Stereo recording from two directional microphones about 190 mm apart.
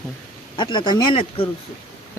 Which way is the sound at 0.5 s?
25° left (ahead or behind).